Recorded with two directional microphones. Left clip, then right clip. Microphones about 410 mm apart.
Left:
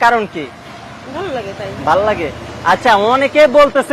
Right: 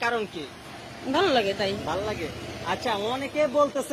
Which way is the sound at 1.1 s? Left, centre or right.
Right.